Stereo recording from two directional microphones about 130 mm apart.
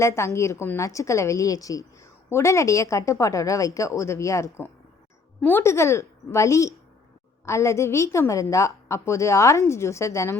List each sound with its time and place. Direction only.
0.0 s a woman's voice: 20° left (ahead or behind)